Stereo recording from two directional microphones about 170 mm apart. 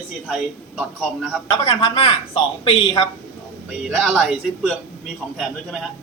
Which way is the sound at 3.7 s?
5° right (ahead or behind).